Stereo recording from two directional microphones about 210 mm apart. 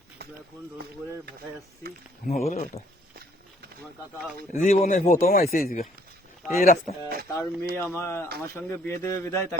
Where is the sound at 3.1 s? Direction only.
45° right (ahead or behind).